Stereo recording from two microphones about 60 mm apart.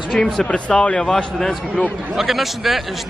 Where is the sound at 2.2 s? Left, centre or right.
Centre.